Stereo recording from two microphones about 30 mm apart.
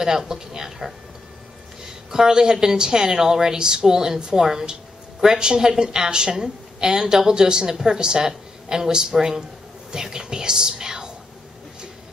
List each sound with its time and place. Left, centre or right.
0.3 s speech: centre
2.0 s a woman's voice: right